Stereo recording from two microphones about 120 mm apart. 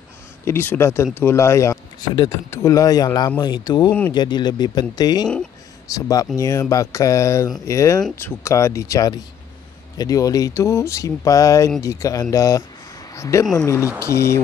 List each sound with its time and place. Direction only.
0.5 s speech: 20° left (ahead or behind)